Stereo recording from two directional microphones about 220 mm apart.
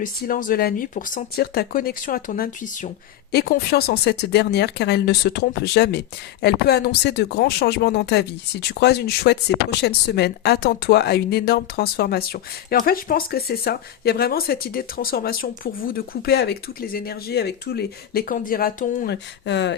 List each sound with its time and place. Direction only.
0.0 s speech: 40° left (ahead or behind)